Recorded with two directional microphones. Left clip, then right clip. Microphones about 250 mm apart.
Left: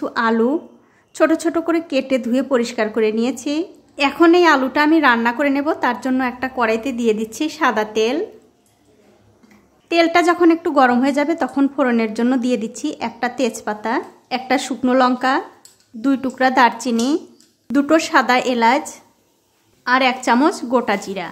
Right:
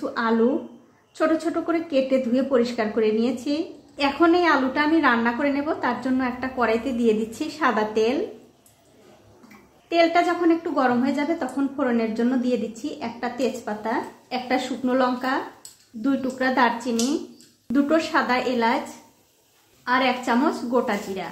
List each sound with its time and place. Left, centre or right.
0.0 s a sound: left
1.1 s a woman's voice: left
9.8 s a woman's voice: left
19.8 s a woman's voice: left